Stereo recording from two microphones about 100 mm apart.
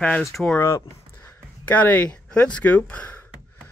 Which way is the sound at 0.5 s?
25° left (ahead or behind).